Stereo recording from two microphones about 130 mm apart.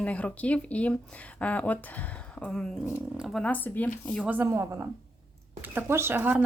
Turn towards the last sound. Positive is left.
turn(degrees=-15)  # may be behind; listen again after turning